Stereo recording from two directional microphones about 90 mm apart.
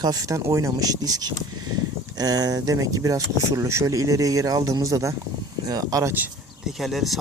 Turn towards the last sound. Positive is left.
turn(degrees=0)  # may be behind; listen again after turning